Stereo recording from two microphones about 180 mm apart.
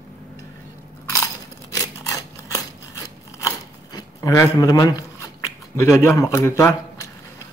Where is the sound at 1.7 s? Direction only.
20° left (ahead or behind).